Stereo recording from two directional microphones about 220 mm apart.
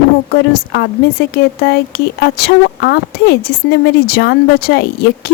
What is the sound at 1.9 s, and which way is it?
A woman's voice, 45° left (ahead or behind).